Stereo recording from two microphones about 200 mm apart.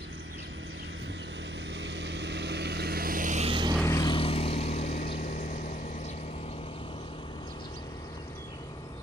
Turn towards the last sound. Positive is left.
turn(degrees=25)  # may be behind; listen again after turning